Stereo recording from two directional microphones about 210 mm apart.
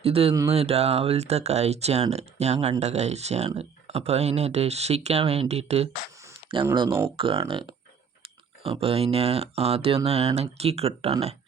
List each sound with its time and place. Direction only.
0.0 s speech: 25° right (ahead or behind)
6.2 s a sound: 25° right (ahead or behind)
6.7 s speech: 20° right (ahead or behind)